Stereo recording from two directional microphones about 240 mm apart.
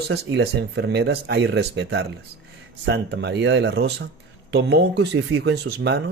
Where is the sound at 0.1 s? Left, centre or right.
Right.